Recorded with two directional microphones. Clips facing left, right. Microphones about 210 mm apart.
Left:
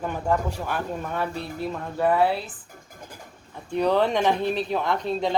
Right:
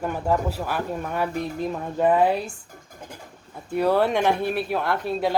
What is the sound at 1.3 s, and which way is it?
Speech, 15° right (ahead or behind).